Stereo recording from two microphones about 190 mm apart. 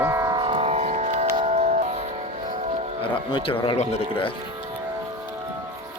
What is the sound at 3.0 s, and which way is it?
Speech, 30° left (ahead or behind).